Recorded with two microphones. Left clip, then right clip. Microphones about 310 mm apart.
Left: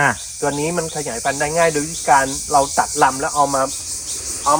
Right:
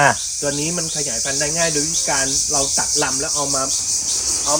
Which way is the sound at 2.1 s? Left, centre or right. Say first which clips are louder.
Left 5 dB; centre.